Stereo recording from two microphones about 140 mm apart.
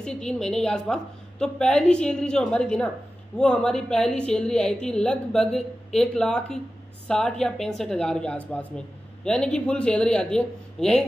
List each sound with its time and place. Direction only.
0.0 s a woman's voice: 5° left (ahead or behind)